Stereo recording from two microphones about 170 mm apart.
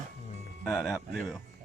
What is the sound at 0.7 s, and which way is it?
Speech, centre (ahead or behind).